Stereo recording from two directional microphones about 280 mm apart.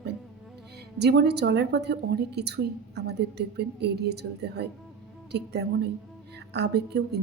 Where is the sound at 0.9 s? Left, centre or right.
Right.